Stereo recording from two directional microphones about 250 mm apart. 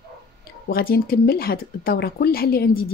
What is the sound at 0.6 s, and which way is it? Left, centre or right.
Speech, left.